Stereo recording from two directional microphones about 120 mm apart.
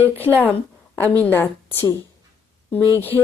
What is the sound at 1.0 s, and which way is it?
Speech, 15° left (ahead or behind).